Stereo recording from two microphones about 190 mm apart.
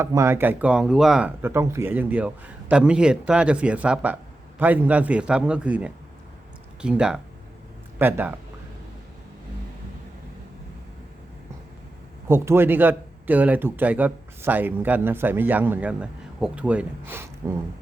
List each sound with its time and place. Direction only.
0.0 s speech: 15° right (ahead or behind)
12.3 s speech: 10° right (ahead or behind)